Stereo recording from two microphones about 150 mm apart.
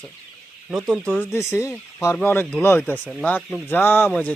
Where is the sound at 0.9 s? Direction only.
Centre (ahead or behind).